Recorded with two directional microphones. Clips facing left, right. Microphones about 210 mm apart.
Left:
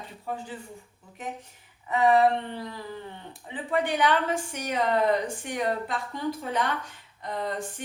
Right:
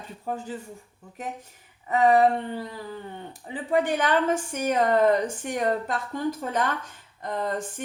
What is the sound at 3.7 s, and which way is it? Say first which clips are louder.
A woman's voice: right 2 dB; 45° right (ahead or behind).